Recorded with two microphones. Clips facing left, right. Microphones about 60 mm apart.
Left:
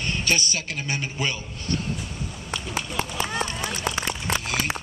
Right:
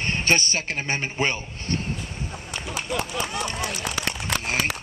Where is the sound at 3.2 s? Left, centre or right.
Left.